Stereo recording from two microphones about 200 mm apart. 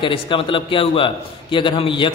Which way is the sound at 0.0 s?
25° left (ahead or behind).